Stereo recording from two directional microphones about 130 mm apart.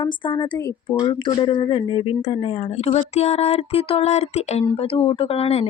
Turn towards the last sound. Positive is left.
turn(degrees=50)  # may be behind; listen again after turning